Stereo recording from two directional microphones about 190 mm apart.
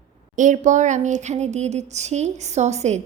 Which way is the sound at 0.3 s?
40° right (ahead or behind).